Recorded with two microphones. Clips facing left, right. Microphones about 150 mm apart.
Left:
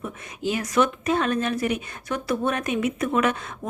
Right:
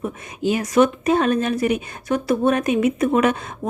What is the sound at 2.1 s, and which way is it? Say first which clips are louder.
Speech: right 6 dB; 40° right (ahead or behind).